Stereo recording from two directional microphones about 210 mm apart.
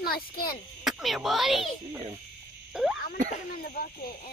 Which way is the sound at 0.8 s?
Centre (ahead or behind).